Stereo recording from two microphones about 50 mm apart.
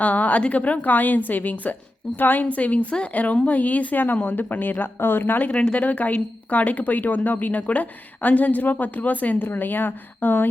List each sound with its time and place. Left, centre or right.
0.0 s speech: left
5.4 s speech: left